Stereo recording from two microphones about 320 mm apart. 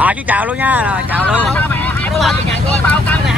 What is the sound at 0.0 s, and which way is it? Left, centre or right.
Speech, centre.